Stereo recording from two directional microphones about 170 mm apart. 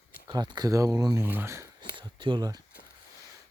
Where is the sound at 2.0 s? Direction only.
30° right (ahead or behind).